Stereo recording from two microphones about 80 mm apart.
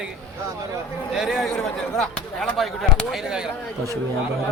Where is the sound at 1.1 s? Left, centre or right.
Centre.